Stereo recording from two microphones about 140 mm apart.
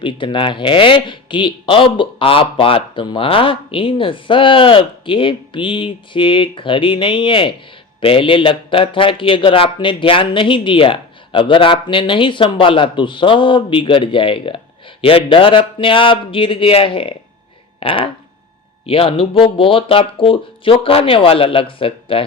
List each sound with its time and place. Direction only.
0.0 s speech: 35° left (ahead or behind)